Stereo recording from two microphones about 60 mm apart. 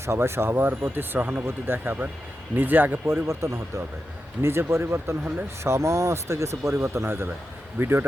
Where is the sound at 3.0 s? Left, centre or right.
Right.